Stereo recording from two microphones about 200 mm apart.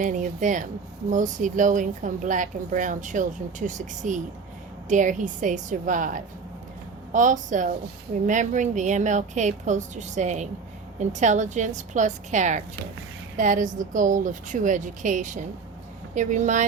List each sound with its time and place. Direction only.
0.0 s a woman's voice: 40° right (ahead or behind)